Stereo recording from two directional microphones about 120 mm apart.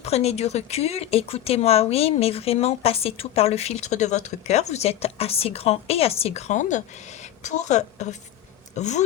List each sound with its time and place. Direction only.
0.0 s a woman's voice: 60° left (ahead or behind); by 9.0 s 80° left